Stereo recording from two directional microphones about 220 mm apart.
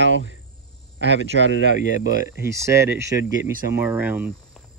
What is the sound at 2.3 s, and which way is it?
Speech, 10° right (ahead or behind).